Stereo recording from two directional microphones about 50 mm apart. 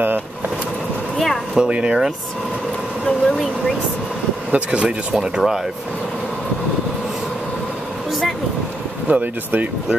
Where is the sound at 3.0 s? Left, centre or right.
Centre.